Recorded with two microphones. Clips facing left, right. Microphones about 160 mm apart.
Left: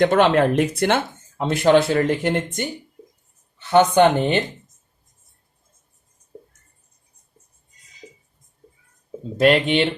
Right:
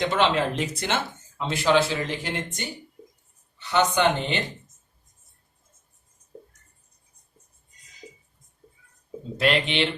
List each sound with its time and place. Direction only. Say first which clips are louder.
0.0 s speech: left 7 dB; 50° left (ahead or behind)
3.7 s speech: left 7 dB; 50° left (ahead or behind)
9.4 s speech: left 7 dB; 45° left (ahead or behind)